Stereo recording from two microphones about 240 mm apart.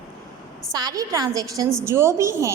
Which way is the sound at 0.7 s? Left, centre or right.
Centre.